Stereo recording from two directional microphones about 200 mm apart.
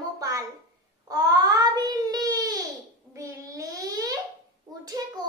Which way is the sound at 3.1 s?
15° right (ahead or behind).